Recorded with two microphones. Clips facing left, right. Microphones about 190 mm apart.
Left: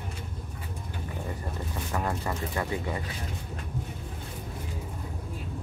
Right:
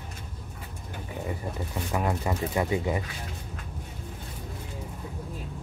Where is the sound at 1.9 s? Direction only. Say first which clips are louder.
Right 3 dB; 15° right (ahead or behind).